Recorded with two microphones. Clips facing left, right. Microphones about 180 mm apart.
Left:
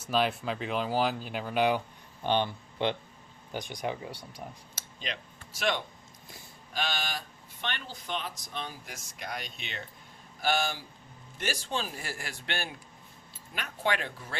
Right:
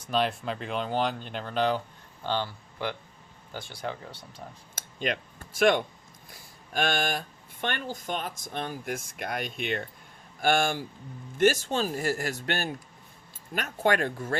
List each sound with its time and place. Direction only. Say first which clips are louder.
0.0 s speech: right 1 dB; centre (ahead or behind)
4.7 s a sound: right 12 dB; 55° right (ahead or behind)
6.7 s speech: right 7 dB; 55° right (ahead or behind)